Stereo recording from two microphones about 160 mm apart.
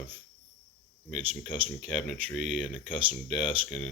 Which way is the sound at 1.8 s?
Centre (ahead or behind).